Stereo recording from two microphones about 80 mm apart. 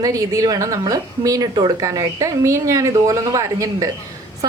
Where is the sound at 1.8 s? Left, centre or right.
Right.